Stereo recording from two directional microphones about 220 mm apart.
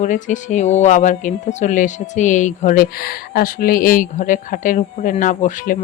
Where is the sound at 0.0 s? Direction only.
35° left (ahead or behind).